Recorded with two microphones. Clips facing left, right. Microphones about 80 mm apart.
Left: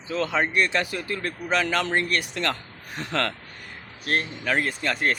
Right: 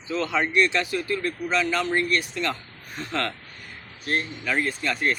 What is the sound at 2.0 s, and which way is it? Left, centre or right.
Speech, left.